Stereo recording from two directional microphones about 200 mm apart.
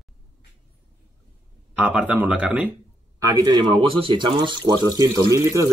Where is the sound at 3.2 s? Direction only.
20° right (ahead or behind).